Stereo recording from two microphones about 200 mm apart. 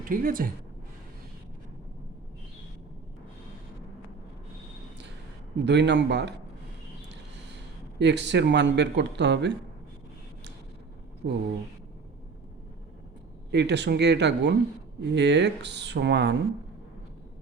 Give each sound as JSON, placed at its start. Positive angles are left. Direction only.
{"t": 0.0, "sound": "a woman's voice", "side_deg": -45}
{"t": 5.6, "sound": "speech", "side_deg": -60}
{"t": 11.2, "sound": "a woman's voice", "side_deg": -55}
{"t": 13.5, "sound": "speech", "side_deg": -60}